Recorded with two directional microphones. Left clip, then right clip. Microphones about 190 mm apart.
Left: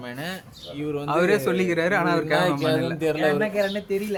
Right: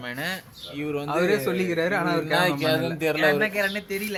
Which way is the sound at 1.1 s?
10° right (ahead or behind).